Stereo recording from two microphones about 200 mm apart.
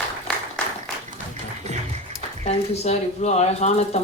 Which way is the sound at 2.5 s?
30° left (ahead or behind).